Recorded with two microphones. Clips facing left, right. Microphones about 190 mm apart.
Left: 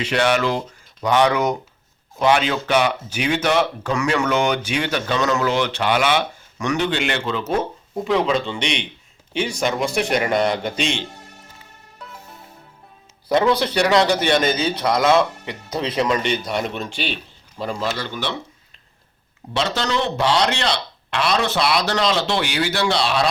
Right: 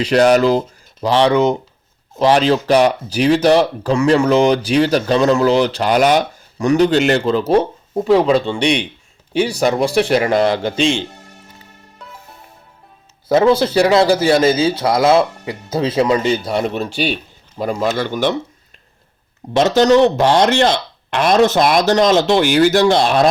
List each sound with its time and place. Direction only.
0.0 s a man's voice: 40° right (ahead or behind)
13.2 s a man's voice: 25° right (ahead or behind); by 18.3 s 45° right (ahead or behind)
19.5 s speech: 45° right (ahead or behind)